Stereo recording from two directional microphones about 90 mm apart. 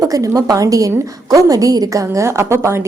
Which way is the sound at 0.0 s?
40° right (ahead or behind).